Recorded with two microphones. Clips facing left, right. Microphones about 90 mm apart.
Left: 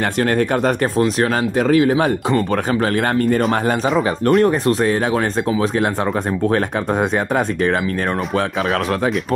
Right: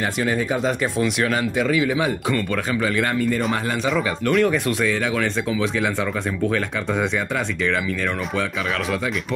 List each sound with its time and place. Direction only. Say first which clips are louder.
0.2 s speech: left 6 dB; 60° left (ahead or behind)
0.9 s speech: left 4 dB; 40° left (ahead or behind); by 3.4 s 55° left (ahead or behind)
4.3 s speech: left 5 dB; 40° left (ahead or behind)
6.5 s speech: left 5 dB; 50° left (ahead or behind)